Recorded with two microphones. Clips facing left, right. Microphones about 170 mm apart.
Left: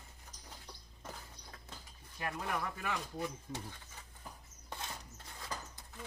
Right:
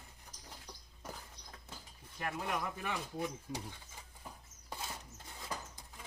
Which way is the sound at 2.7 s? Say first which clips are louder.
Even; centre (ahead or behind).